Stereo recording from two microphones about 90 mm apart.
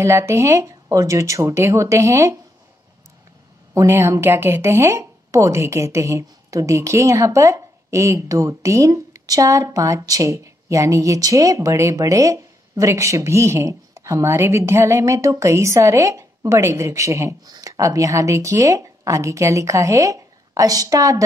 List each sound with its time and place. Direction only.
0.0 s a woman's voice: 35° right (ahead or behind)
3.7 s a woman's voice: 30° right (ahead or behind)